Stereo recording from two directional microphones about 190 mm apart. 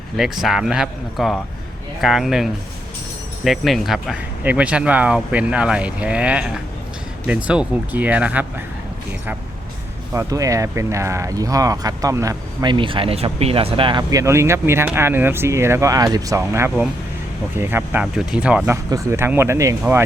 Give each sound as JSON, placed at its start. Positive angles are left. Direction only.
{"t": 0.4, "sound": "a man's voice", "side_deg": 0}
{"t": 10.1, "sound": "speech", "side_deg": -15}